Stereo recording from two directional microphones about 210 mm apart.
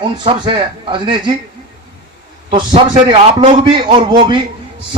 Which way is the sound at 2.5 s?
25° right (ahead or behind).